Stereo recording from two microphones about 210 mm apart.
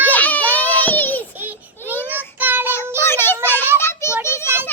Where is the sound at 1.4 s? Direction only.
10° right (ahead or behind).